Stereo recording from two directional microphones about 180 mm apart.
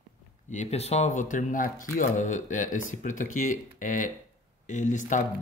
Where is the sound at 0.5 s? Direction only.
40° left (ahead or behind).